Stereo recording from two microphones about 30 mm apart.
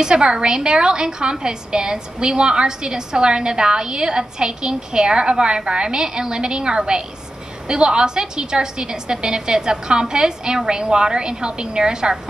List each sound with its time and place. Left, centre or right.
0.0 s a woman's voice: right